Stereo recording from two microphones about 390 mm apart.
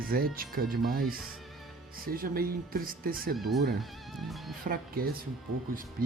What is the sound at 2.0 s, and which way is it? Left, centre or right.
Speech, right.